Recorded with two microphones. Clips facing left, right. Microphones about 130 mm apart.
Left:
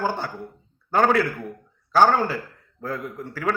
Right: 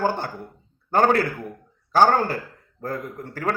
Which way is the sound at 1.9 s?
45° right (ahead or behind).